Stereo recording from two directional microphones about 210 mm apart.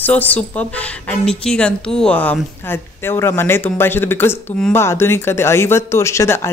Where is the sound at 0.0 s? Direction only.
10° left (ahead or behind).